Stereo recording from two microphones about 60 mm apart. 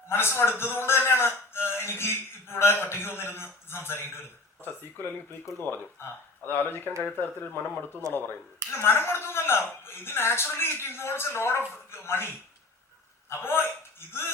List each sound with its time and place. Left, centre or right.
0.1 s a man's voice: left
8.0 s speech: right
8.7 s a man's voice: left
13.3 s a man's voice: left